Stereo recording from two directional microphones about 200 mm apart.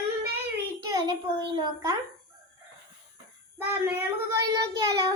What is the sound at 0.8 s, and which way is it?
A child's voice, 20° right (ahead or behind).